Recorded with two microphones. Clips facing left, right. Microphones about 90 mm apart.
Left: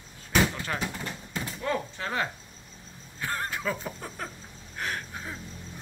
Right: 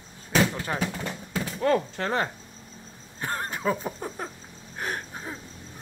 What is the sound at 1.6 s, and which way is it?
Speech, 50° right (ahead or behind).